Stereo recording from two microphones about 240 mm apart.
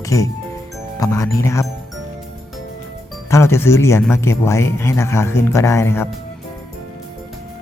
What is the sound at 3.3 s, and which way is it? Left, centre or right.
Speech, centre.